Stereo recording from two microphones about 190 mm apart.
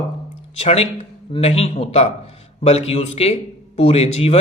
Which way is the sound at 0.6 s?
35° left (ahead or behind).